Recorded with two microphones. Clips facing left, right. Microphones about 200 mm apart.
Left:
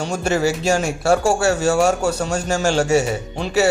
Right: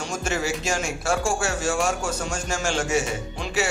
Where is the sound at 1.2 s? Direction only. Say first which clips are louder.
Left 8 dB; 70° left (ahead or behind).